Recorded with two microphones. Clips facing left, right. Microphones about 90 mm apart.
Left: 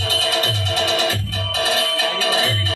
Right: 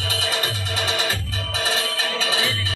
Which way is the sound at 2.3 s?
40° left (ahead or behind).